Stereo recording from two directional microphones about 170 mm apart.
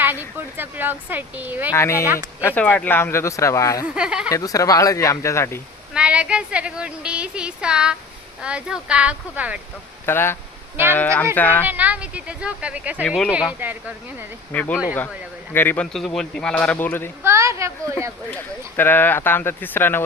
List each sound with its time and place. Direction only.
0.0 s speech: 10° right (ahead or behind)
1.7 s speech: 15° left (ahead or behind)
3.8 s speech: 5° right (ahead or behind)
4.3 s speech: 20° left (ahead or behind)
5.9 s speech: 5° right (ahead or behind)
10.1 s speech: 15° left (ahead or behind)
11.7 s speech: 10° right (ahead or behind)
14.5 s speech: 10° left (ahead or behind)
17.2 s speech: 15° right (ahead or behind)
18.3 s speech: 10° left (ahead or behind)